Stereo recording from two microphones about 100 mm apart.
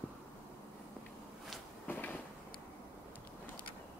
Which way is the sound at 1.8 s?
15° left (ahead or behind).